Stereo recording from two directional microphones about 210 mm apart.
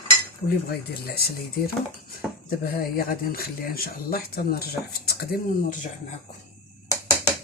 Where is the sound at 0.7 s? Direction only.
50° left (ahead or behind).